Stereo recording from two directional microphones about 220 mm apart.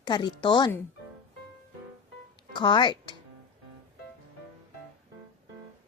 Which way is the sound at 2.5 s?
20° left (ahead or behind).